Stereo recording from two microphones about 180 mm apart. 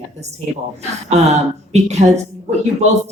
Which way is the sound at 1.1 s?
40° right (ahead or behind).